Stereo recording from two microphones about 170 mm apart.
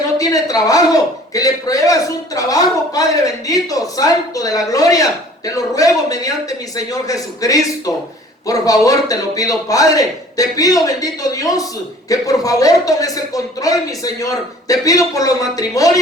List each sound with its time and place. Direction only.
0.2 s a woman's voice: 20° left (ahead or behind)